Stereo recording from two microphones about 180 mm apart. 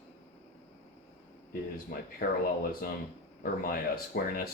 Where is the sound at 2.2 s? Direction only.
65° left (ahead or behind).